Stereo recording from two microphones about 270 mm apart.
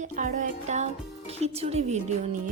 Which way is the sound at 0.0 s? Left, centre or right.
Right.